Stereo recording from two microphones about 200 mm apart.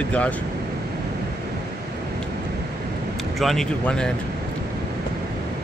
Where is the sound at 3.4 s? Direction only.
Centre (ahead or behind).